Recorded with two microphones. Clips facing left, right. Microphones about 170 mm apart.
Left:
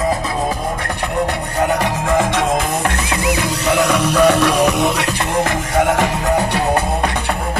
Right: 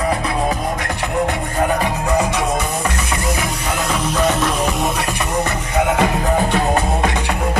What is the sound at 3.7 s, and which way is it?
Music, 75° left (ahead or behind).